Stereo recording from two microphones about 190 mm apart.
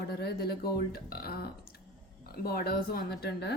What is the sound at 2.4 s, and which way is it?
Speech, 55° left (ahead or behind).